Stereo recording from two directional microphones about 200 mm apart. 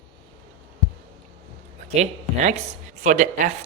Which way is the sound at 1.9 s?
35° right (ahead or behind).